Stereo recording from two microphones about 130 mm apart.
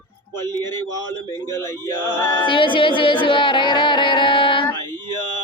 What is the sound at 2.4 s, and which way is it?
Music, 40° left (ahead or behind).